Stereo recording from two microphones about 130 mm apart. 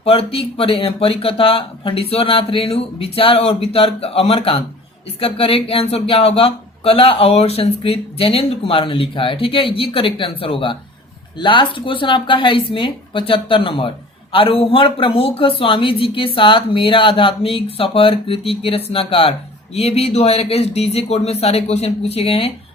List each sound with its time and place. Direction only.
0.0 s speech: 50° left (ahead or behind)